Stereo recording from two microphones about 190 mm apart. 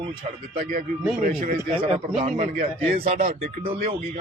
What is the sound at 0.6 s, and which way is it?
Speech, 50° right (ahead or behind).